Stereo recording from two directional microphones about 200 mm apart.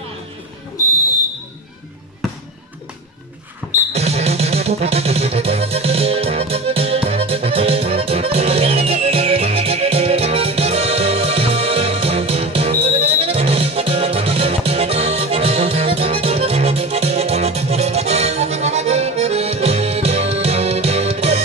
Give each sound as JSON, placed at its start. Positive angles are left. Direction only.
{"t": 3.9, "sound": "music", "side_deg": -30}